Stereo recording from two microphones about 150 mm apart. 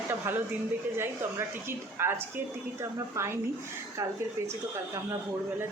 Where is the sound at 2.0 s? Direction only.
15° right (ahead or behind).